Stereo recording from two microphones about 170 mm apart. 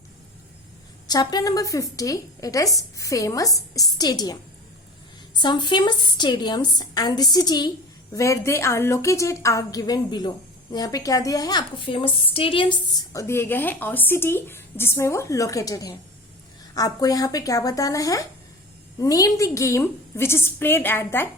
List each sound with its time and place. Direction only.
1.0 s a woman's voice: 25° left (ahead or behind)